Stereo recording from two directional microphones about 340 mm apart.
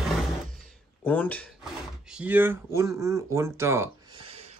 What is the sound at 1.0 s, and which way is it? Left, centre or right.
Speech, centre.